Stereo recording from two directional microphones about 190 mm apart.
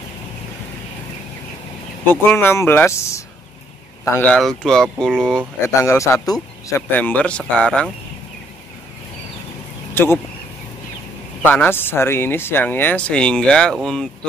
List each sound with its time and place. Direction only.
2.0 s speech: 10° left (ahead or behind)
5.8 s speech: 15° left (ahead or behind)
7.0 s speech: 5° left (ahead or behind)
9.9 s speech: 10° left (ahead or behind)
11.4 s speech: 10° left (ahead or behind)